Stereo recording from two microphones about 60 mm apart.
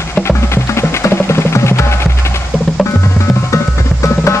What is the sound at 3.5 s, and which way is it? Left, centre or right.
Music, left.